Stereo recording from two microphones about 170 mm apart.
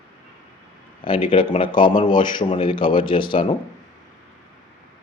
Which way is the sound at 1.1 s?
30° left (ahead or behind).